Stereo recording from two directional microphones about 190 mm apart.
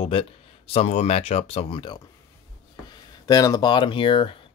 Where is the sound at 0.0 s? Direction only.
30° left (ahead or behind).